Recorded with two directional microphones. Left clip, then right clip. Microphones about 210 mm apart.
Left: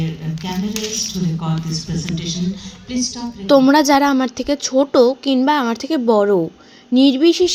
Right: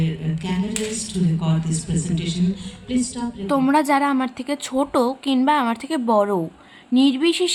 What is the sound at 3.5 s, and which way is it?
A woman's voice, 15° left (ahead or behind).